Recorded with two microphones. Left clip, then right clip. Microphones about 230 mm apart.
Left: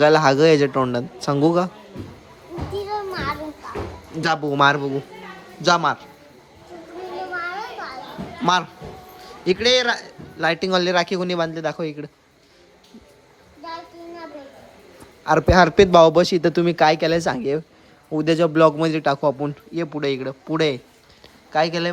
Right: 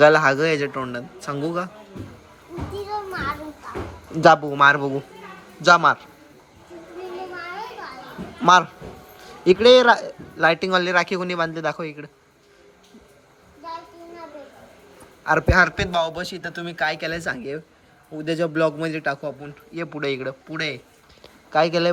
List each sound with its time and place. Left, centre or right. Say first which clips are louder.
0.0 s speech: left 1 dB; centre
3.1 s children playing: left 1 dB; centre
4.4 s speech: right 1 dB; centre
8.4 s a man's voice: right 5 dB; centre
15.2 s speech: left 2 dB; centre
15.9 s speech: left 11 dB; left; by 20.3 s centre
20.5 s speech: left 9 dB; left
21.5 s speech: right 1 dB; centre